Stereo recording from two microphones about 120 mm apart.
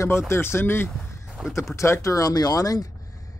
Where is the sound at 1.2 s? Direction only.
5° right (ahead or behind).